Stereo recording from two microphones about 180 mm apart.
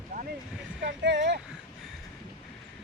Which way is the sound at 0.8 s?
75° right (ahead or behind).